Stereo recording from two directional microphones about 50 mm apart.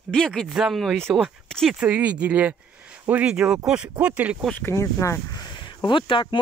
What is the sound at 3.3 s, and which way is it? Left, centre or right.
Speech, centre.